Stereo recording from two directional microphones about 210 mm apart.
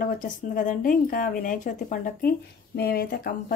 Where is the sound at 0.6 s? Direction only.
40° left (ahead or behind).